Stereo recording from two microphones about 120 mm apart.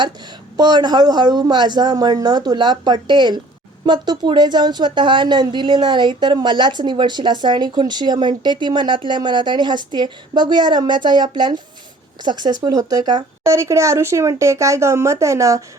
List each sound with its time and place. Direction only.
0.5 s a woman's voice: 35° right (ahead or behind)
13.4 s speech: 25° right (ahead or behind)